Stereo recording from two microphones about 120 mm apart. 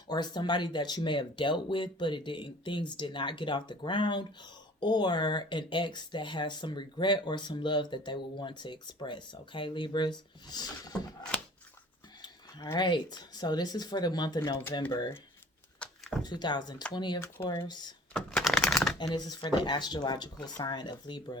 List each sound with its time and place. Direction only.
0.1 s speech: 40° left (ahead or behind)
12.7 s speech: 35° left (ahead or behind)
15.8 s a sound: 10° left (ahead or behind)
16.2 s speech: 40° left (ahead or behind)
17.2 s speech: 20° left (ahead or behind)
17.5 s speech: 35° left (ahead or behind)
18.1 s typing: 5° left (ahead or behind)
18.9 s speech: 35° left (ahead or behind)